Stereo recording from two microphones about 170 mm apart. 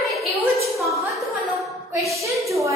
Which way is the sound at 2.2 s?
20° right (ahead or behind).